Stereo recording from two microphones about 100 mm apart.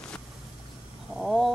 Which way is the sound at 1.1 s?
5° right (ahead or behind).